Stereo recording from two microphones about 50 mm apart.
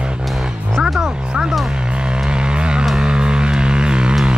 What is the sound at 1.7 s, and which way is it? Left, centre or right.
Vehicle, centre.